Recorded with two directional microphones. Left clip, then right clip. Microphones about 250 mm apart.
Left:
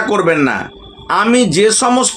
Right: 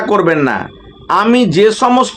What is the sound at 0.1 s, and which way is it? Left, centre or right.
Speech, centre.